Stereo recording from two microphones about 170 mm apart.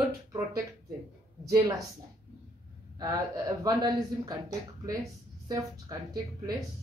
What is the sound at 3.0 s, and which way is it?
Speech, 20° right (ahead or behind).